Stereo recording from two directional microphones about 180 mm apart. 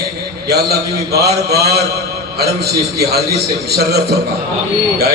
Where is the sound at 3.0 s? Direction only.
60° right (ahead or behind).